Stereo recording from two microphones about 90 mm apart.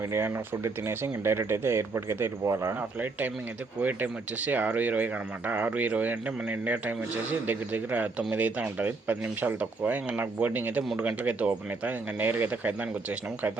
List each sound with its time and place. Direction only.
0.1 s speech: 30° right (ahead or behind)
3.8 s speech: 20° right (ahead or behind)